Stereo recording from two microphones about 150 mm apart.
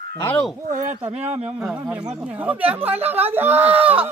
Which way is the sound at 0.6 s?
55° right (ahead or behind).